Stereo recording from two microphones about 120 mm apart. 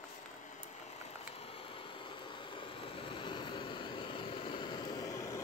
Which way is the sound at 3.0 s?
45° left (ahead or behind).